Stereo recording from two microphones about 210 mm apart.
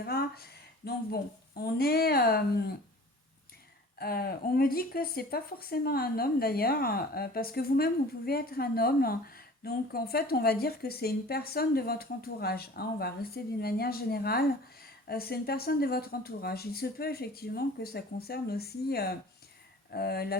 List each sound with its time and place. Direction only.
0.0 s a sound: 45° left (ahead or behind)
0.9 s speech: 50° left (ahead or behind)
3.9 s speech: 45° left (ahead or behind)